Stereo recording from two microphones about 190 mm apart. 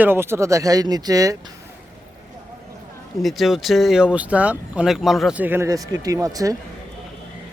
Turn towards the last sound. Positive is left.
turn(degrees=-20)  # may be behind; listen again after turning